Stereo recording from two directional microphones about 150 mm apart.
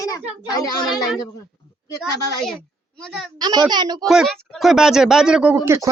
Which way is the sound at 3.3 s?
30° right (ahead or behind).